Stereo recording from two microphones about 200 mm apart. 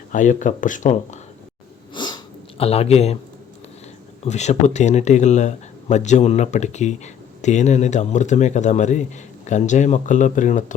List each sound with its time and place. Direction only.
0.1 s speech: 40° left (ahead or behind)
1.9 s sniff: 20° left (ahead or behind)
4.2 s speech: 35° left (ahead or behind)